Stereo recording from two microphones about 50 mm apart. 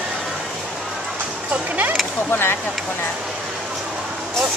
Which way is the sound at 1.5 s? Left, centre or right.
Right.